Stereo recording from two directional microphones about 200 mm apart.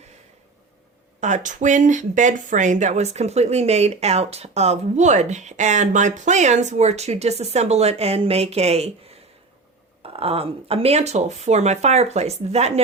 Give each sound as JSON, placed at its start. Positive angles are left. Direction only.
{"t": 1.2, "sound": "speech", "side_deg": -40}